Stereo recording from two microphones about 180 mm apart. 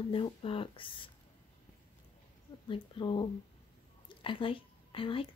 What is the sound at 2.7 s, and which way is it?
A woman's voice, 25° left (ahead or behind).